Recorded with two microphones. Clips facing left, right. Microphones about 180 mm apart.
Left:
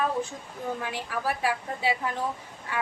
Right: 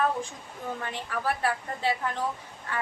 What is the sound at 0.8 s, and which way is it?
A woman's voice, 10° left (ahead or behind).